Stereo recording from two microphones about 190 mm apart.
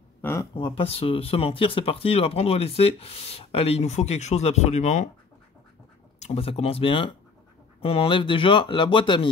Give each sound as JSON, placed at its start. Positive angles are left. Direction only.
{"t": 0.2, "sound": "a sound", "side_deg": 15}
{"t": 0.6, "sound": "speech", "side_deg": 25}
{"t": 6.1, "sound": "speech", "side_deg": 35}